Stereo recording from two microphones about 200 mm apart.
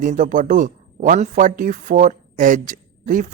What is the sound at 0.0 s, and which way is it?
Speech, 40° right (ahead or behind).